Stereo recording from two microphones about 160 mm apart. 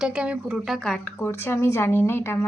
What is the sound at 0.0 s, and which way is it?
Speech, 5° right (ahead or behind).